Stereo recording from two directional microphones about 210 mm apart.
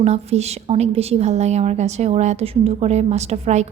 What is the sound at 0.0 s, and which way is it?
A woman's voice, 30° right (ahead or behind).